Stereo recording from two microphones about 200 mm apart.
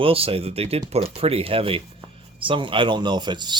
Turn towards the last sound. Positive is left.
turn(degrees=-20)  # may be behind; listen again after turning